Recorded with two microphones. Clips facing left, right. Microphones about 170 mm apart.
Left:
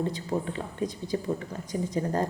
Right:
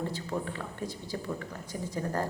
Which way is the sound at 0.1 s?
20° left (ahead or behind).